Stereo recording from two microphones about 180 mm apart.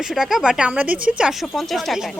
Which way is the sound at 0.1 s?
Centre (ahead or behind).